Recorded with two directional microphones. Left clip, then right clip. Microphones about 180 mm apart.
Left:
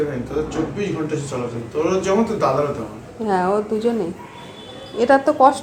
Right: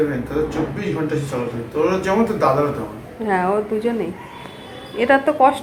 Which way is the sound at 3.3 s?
15° left (ahead or behind).